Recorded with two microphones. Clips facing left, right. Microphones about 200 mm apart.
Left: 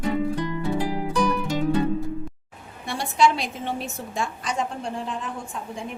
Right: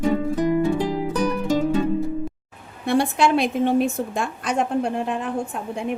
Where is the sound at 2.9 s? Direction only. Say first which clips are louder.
Right 3 dB; 55° right (ahead or behind).